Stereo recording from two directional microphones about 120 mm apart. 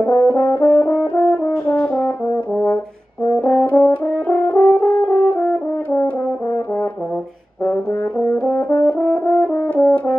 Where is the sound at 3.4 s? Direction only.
15° left (ahead or behind).